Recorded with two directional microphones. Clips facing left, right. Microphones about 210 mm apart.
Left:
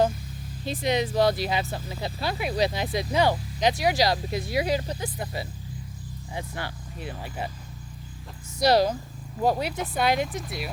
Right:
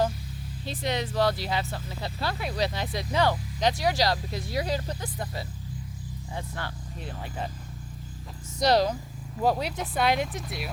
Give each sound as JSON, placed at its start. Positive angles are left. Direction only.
{"t": 0.6, "sound": "speech", "side_deg": 15}
{"t": 8.5, "sound": "speech", "side_deg": 5}